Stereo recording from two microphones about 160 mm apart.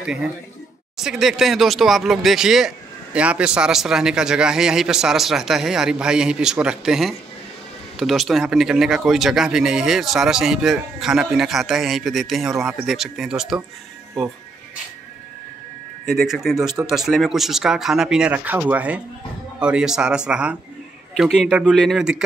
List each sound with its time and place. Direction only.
0.0 s a man's voice: 5° right (ahead or behind)
16.2 s speech: centre (ahead or behind)